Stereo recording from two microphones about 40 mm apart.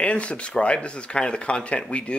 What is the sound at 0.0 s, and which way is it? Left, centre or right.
Speech, left.